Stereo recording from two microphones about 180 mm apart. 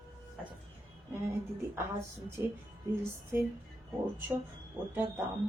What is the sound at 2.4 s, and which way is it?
Speech, 15° right (ahead or behind).